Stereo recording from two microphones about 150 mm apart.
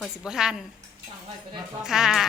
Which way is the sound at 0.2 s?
5° right (ahead or behind).